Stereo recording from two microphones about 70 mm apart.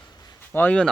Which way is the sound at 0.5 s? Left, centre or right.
Left.